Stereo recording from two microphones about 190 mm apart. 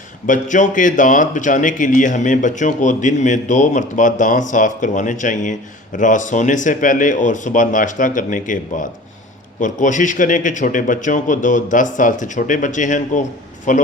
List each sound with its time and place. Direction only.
0.3 s speech: 40° left (ahead or behind)